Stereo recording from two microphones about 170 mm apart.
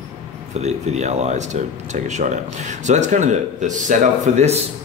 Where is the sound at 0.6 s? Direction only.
40° right (ahead or behind).